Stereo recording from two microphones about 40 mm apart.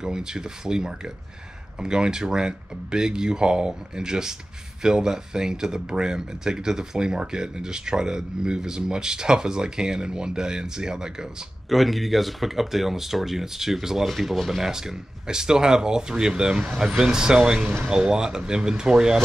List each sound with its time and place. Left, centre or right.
0.0 s speech: centre
11.7 s speech: centre
14.6 s speech: centre